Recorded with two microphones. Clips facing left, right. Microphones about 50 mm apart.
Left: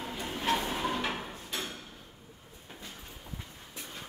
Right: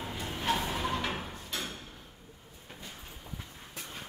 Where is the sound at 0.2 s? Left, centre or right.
Centre.